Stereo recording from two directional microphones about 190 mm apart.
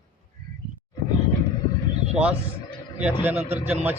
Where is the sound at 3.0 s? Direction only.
10° right (ahead or behind).